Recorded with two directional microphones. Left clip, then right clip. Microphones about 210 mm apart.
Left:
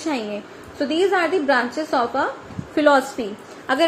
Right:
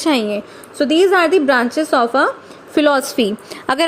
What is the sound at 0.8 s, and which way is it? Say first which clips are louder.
A woman's voice: right 7 dB; 55° right (ahead or behind).